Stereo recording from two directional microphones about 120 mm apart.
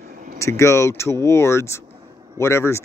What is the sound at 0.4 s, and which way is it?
Speech, 25° left (ahead or behind).